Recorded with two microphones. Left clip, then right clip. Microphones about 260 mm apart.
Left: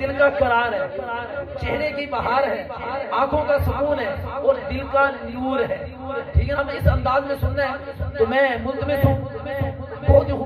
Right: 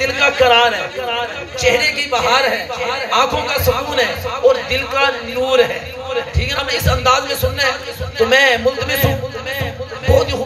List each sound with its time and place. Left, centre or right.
0.0 s a man's voice: right
8.2 s a man's voice: right
9.6 s music: right